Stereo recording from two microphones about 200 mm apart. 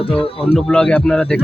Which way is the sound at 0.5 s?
5° left (ahead or behind).